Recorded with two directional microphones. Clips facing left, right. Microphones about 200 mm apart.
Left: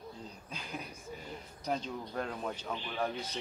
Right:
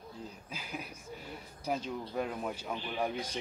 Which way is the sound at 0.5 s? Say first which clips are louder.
Left 1 dB; 5° right (ahead or behind).